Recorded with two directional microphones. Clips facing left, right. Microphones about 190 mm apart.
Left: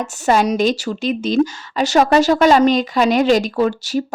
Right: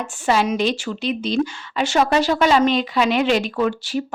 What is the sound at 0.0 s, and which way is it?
A woman's voice, 45° left (ahead or behind).